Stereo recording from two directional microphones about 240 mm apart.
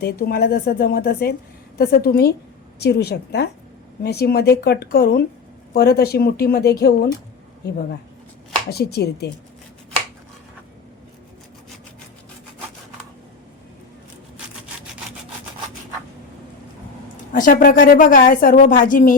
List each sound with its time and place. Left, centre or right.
0.0 s a woman's voice: left
17.3 s a woman's voice: left